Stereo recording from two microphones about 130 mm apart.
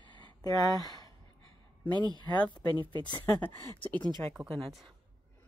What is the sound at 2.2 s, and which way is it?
Speech, 35° left (ahead or behind).